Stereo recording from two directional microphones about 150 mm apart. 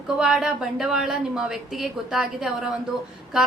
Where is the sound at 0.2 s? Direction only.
5° right (ahead or behind).